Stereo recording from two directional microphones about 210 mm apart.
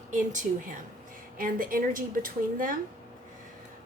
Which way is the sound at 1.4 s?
40° right (ahead or behind).